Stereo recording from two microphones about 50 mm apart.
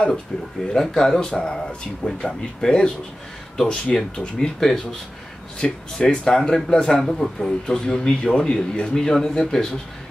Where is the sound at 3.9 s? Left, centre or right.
Centre.